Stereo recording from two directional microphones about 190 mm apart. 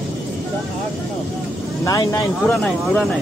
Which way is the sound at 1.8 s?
15° left (ahead or behind).